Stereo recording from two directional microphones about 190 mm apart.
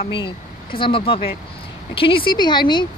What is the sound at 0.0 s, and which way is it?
Speech, 25° left (ahead or behind).